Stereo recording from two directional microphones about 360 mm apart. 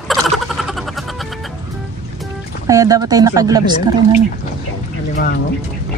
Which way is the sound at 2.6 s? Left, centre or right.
Centre.